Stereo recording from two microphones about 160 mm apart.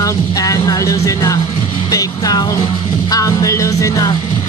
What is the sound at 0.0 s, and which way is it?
Speech, 20° left (ahead or behind).